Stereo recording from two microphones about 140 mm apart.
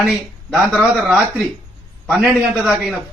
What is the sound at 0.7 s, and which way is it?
A man's voice, centre (ahead or behind).